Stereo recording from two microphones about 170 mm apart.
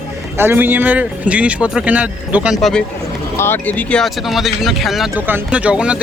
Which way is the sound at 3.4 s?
10° left (ahead or behind).